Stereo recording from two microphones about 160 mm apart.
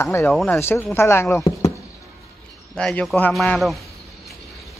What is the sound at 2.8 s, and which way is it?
A woman's voice, 5° left (ahead or behind).